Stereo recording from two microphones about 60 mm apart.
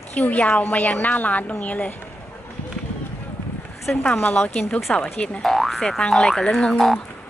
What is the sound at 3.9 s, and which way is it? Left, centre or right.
A woman's voice, left.